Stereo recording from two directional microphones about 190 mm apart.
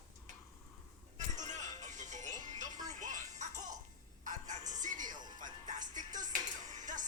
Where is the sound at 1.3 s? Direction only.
40° right (ahead or behind).